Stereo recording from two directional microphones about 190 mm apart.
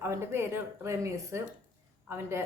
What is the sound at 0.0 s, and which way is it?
Speech, 15° right (ahead or behind).